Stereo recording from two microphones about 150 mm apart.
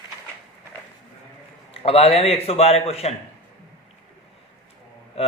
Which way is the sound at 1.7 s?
40° left (ahead or behind).